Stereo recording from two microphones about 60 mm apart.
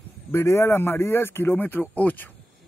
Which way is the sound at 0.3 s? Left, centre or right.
Left.